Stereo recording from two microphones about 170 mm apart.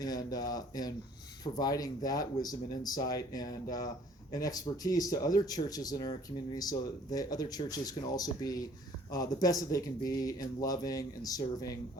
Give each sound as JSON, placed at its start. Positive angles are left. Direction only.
{"t": 0.0, "sound": "speech", "side_deg": 20}